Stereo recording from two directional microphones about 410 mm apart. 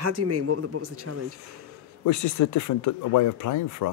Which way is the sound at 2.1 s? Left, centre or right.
Left.